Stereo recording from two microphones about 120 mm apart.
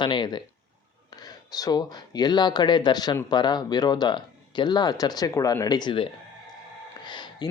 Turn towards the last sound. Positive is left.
turn(degrees=40)  # may be behind; listen again after turning